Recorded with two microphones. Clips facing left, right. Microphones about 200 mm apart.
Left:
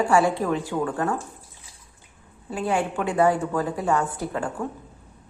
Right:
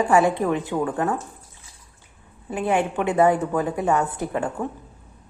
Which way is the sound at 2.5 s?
20° right (ahead or behind).